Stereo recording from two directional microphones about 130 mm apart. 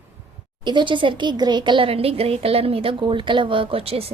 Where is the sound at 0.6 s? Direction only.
35° right (ahead or behind).